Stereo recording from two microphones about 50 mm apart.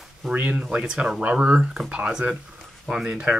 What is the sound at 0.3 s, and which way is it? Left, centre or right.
Speech, right.